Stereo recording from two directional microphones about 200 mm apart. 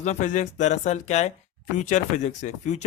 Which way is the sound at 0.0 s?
35° left (ahead or behind).